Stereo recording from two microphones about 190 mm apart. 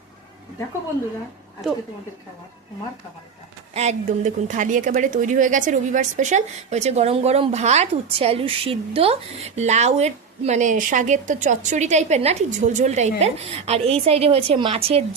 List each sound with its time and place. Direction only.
3.8 s a woman's voice: 40° right (ahead or behind)